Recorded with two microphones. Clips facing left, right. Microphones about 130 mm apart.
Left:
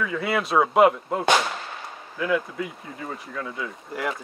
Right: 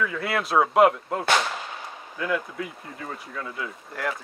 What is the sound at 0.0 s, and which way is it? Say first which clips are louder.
Speech: left 1 dB; centre (ahead or behind).